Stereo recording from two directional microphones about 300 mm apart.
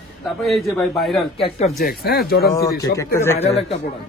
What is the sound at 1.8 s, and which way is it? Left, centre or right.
Speech, left.